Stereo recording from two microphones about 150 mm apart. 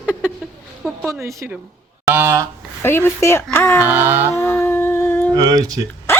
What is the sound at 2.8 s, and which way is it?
Speech, 15° left (ahead or behind).